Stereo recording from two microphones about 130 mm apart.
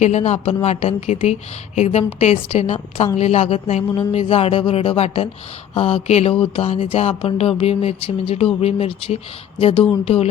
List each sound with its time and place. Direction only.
0.0 s a woman's voice: 60° left (ahead or behind)